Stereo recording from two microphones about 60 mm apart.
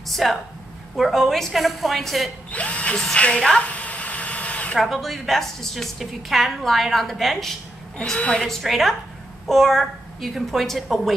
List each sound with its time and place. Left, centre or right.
0.1 s a woman's voice: centre
2.5 s a woman's voice: left
3.2 s a sound: centre
4.7 s a woman's voice: centre
8.0 s a woman's voice: centre
8.5 s a woman's voice: centre